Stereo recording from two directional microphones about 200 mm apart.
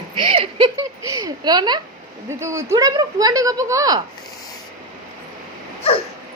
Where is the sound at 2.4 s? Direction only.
15° right (ahead or behind).